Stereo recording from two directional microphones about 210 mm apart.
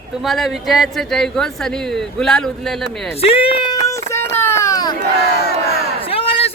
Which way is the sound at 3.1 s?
25° left (ahead or behind).